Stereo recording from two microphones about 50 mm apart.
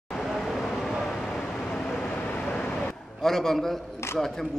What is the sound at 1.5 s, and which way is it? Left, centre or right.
Vehicle, centre.